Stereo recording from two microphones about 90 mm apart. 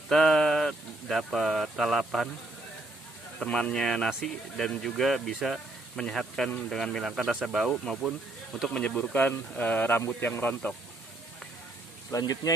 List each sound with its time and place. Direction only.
0.1 s speech: 5° left (ahead or behind)
3.4 s speech: 10° left (ahead or behind)
8.7 s speech: 10° left (ahead or behind)
12.1 s speech: 40° left (ahead or behind)